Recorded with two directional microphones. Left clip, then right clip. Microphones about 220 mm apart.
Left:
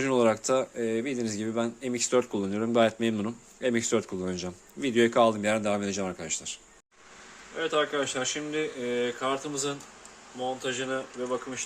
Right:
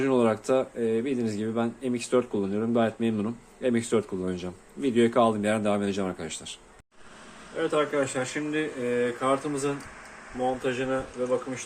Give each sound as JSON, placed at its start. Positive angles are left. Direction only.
{"t": 0.0, "sound": "speech", "side_deg": 20}
{"t": 7.6, "sound": "speech", "side_deg": 15}